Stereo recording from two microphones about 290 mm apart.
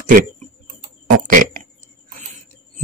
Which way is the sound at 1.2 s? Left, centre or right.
Right.